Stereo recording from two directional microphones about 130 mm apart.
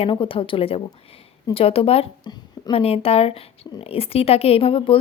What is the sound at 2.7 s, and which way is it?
A woman's voice, 50° left (ahead or behind).